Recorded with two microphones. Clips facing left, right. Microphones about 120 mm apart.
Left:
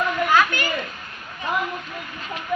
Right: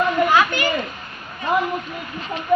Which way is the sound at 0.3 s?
10° right (ahead or behind).